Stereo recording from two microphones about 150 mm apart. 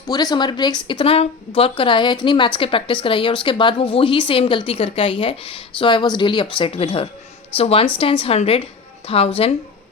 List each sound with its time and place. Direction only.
0.1 s a woman's voice: 25° left (ahead or behind)